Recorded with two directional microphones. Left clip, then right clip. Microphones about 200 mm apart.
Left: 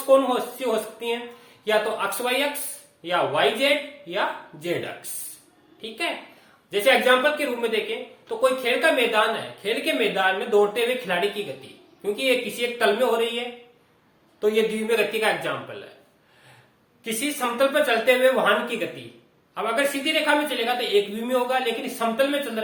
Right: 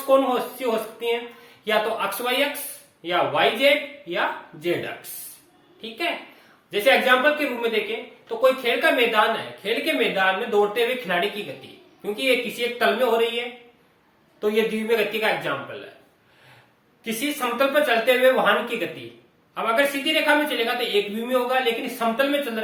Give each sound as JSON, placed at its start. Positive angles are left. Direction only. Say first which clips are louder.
{"t": 0.0, "sound": "a woman's voice", "louder": "even", "side_deg": 15}
{"t": 14.4, "sound": "a woman's voice", "louder": "even", "side_deg": 15}
{"t": 17.0, "sound": "speech", "louder": "even", "side_deg": 20}